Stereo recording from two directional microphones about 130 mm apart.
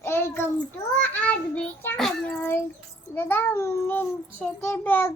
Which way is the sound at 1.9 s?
Centre (ahead or behind).